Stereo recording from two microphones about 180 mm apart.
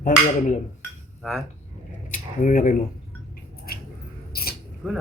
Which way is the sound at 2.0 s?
45° left (ahead or behind).